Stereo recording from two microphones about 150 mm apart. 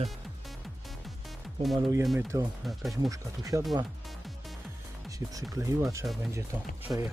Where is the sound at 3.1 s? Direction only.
20° right (ahead or behind).